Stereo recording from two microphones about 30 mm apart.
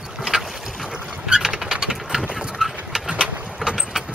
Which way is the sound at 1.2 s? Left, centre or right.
Right.